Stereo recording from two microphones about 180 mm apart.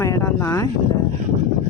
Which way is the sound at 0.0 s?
15° left (ahead or behind).